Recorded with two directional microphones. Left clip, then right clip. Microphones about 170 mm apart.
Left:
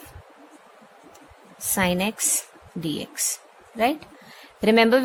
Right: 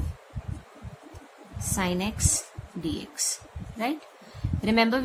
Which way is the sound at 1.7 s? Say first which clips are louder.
Left 6 dB; 50° left (ahead or behind).